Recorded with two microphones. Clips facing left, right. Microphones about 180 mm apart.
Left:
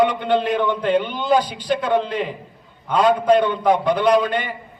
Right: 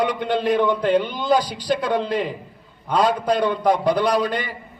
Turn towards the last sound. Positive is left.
turn(degrees=-35)  # may be behind; listen again after turning